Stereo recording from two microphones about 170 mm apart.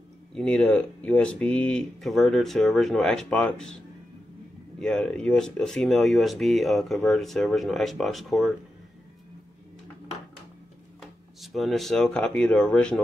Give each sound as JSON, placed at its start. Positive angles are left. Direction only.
{"t": 0.3, "sound": "speech", "side_deg": 5}
{"t": 4.7, "sound": "speech", "side_deg": 5}
{"t": 11.0, "sound": "speech", "side_deg": 0}